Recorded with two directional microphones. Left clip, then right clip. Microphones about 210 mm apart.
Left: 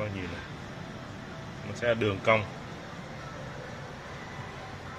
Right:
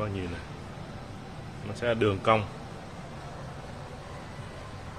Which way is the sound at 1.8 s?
15° right (ahead or behind).